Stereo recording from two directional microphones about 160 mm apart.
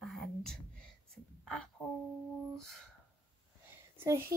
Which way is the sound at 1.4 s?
5° left (ahead or behind).